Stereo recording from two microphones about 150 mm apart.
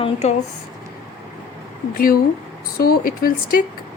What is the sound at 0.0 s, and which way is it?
Speech, 45° left (ahead or behind).